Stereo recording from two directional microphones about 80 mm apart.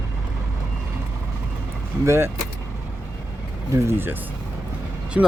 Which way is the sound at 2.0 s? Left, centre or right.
Right.